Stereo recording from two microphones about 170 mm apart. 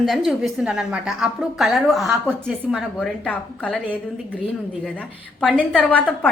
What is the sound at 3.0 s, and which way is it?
A woman's voice, 5° left (ahead or behind).